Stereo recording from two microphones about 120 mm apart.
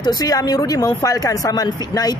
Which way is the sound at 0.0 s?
35° left (ahead or behind).